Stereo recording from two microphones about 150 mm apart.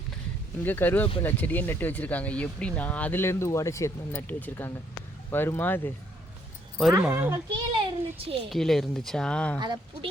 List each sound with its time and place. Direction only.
0.6 s speech: 10° left (ahead or behind)
6.9 s speech: 15° right (ahead or behind)
7.8 s a sound: 40° right (ahead or behind)
8.4 s speech: centre (ahead or behind)
9.6 s speech: 30° right (ahead or behind)